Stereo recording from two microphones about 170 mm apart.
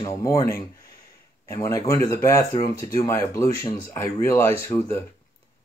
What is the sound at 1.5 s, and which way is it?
Speech, 20° left (ahead or behind).